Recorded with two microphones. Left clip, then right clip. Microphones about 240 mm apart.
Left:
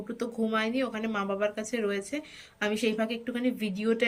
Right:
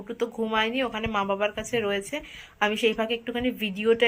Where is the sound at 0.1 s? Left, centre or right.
Centre.